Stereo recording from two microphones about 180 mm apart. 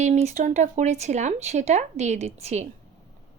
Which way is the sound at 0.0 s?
40° right (ahead or behind).